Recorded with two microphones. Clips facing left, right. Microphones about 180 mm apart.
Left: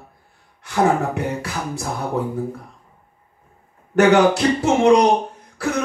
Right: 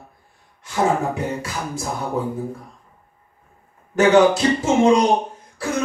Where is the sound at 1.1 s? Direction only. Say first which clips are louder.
Left 1 dB; 65° left (ahead or behind).